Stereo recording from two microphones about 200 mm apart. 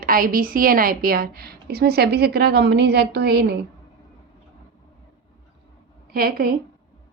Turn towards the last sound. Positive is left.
turn(degrees=-50)  # may be behind; listen again after turning